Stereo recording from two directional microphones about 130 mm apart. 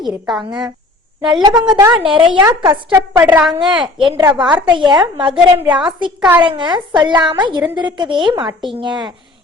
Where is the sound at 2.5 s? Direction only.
25° right (ahead or behind).